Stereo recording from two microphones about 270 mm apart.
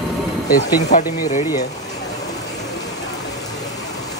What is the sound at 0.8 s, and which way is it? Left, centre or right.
Speech, left.